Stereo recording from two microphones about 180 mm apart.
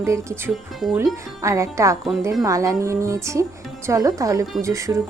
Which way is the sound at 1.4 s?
15° right (ahead or behind).